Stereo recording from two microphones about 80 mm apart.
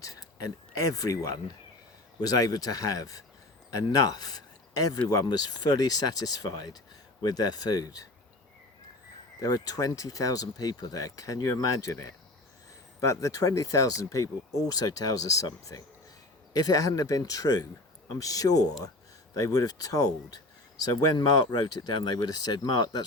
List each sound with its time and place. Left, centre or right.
0.0 s speech: left
9.4 s speech: left
14.7 s speech: left